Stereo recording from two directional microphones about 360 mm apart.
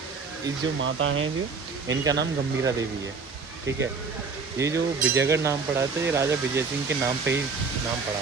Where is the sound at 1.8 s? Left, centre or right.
Centre.